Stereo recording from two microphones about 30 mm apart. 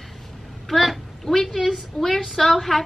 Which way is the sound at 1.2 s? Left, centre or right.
Centre.